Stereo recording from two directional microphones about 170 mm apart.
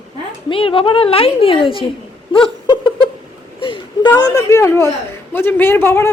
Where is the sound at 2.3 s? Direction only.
30° left (ahead or behind).